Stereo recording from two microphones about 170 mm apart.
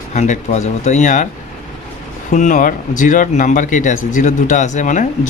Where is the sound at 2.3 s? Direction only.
45° left (ahead or behind).